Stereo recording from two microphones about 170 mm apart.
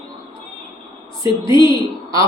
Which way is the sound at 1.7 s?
20° right (ahead or behind).